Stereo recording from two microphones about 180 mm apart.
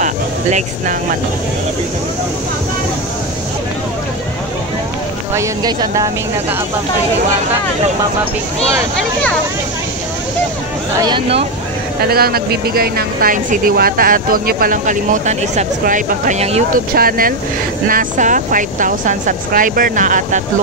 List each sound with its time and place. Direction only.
0.0 s a sound: 45° right (ahead or behind)
5.3 s speech: 20° right (ahead or behind)
8.9 s speech: 5° left (ahead or behind)
11.1 s speech: 30° right (ahead or behind)
12.1 s speech: 60° right (ahead or behind); by 16.8 s 40° right (ahead or behind)
16.9 s speech: 55° right (ahead or behind)